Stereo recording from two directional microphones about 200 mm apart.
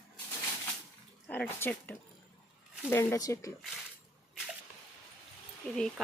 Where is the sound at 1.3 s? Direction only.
10° left (ahead or behind).